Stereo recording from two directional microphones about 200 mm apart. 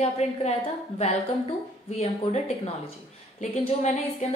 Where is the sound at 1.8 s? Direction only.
30° left (ahead or behind).